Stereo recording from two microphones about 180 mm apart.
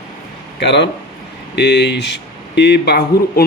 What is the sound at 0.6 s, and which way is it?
A man's voice, 75° left (ahead or behind).